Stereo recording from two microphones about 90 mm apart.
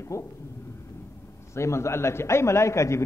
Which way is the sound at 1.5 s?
30° left (ahead or behind).